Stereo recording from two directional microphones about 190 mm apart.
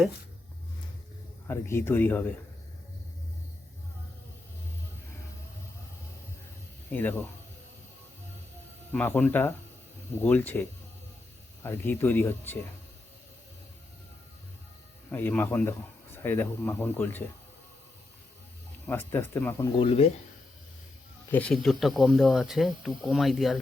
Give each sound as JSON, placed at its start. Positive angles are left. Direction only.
{"t": 1.5, "sound": "speech", "side_deg": 15}
{"t": 6.9, "sound": "speech", "side_deg": 10}
{"t": 8.9, "sound": "speech", "side_deg": 10}
{"t": 15.1, "sound": "speech", "side_deg": 10}
{"t": 18.9, "sound": "speech", "side_deg": 10}
{"t": 19.8, "sound": "speech", "side_deg": 30}
{"t": 21.3, "sound": "speech", "side_deg": 5}